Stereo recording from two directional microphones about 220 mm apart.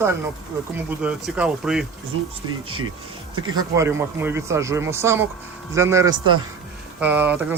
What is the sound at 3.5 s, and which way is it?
Speech, 15° right (ahead or behind).